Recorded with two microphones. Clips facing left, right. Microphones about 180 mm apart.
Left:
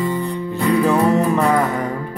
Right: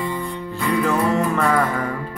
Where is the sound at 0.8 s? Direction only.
20° left (ahead or behind).